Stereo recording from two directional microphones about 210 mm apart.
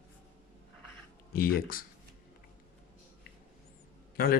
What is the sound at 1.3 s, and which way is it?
Speech, 45° left (ahead or behind).